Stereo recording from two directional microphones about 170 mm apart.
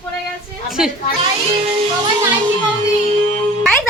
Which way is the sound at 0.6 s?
Centre (ahead or behind).